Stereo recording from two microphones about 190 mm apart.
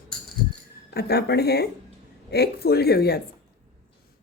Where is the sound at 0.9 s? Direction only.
55° left (ahead or behind).